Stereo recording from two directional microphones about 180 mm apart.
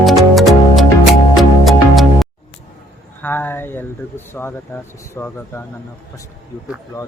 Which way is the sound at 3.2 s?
10° left (ahead or behind).